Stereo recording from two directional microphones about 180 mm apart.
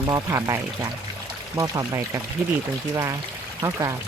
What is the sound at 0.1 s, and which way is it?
Speech, 20° right (ahead or behind).